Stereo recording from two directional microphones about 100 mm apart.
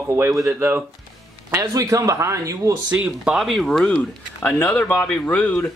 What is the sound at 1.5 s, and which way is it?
Speech, 35° right (ahead or behind).